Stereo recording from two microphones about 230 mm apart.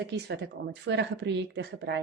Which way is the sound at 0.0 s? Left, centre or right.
Right.